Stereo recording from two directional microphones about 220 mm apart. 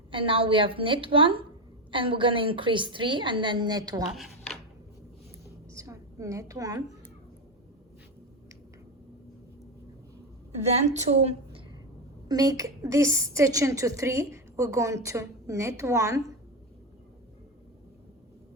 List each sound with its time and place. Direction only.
0.1 s a woman's voice: 25° right (ahead or behind)
5.7 s a woman's voice: 15° right (ahead or behind)
10.8 s a woman's voice: 30° right (ahead or behind)
12.3 s a woman's voice: 15° right (ahead or behind)